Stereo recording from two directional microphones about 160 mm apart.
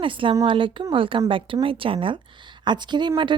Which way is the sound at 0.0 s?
35° right (ahead or behind).